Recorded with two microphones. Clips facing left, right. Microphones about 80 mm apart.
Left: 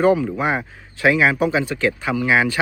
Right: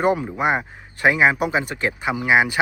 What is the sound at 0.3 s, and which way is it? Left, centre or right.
Speech, centre.